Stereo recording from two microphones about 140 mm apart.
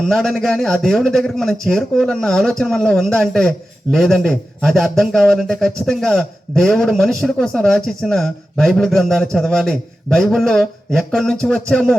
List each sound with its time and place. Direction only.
0.0 s a man's voice: centre (ahead or behind)